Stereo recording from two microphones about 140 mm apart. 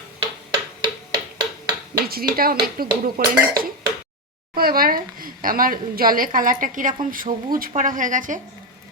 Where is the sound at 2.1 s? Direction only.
90° right.